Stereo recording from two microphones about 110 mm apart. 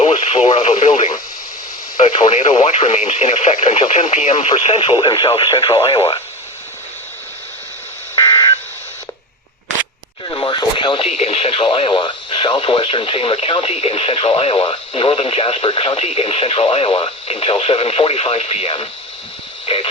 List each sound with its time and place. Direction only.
0.0 s radio: 70° left (ahead or behind)
2.0 s speech: 70° left (ahead or behind); by 6.2 s 45° left (ahead or behind)
8.1 s telephone dialing: 40° left (ahead or behind)
10.2 s radio: 45° left (ahead or behind)
11.2 s speech: 65° left (ahead or behind)
19.6 s a sound: 60° left (ahead or behind)